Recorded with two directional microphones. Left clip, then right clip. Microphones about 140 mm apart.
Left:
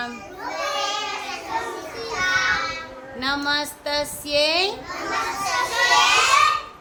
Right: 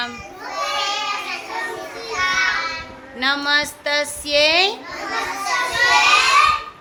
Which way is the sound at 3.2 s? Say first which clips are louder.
Right 5 dB; 5° right (ahead or behind).